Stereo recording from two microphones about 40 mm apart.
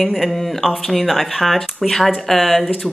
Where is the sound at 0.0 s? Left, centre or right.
Centre.